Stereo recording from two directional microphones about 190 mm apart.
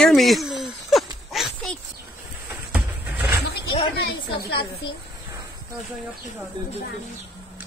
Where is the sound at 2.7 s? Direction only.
10° right (ahead or behind).